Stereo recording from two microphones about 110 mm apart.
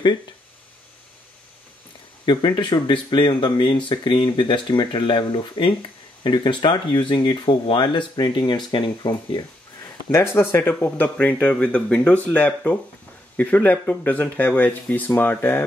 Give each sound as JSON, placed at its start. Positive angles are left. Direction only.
{"t": 2.2, "sound": "speech", "side_deg": 45}
{"t": 10.1, "sound": "speech", "side_deg": 20}